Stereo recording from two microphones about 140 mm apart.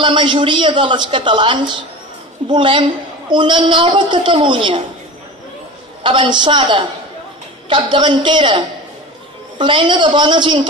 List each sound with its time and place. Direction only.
0.0 s a woman's voice: 35° right (ahead or behind)
6.0 s a woman's voice: 35° right (ahead or behind)